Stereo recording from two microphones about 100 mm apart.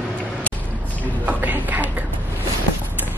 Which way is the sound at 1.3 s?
15° right (ahead or behind).